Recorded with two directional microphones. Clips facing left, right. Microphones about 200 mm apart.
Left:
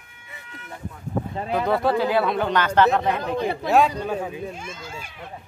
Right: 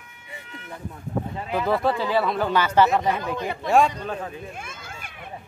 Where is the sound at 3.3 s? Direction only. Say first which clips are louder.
Left 4 dB; 35° left (ahead or behind).